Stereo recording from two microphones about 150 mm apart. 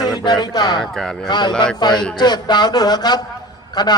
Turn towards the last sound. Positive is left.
turn(degrees=25)  # may be behind; listen again after turning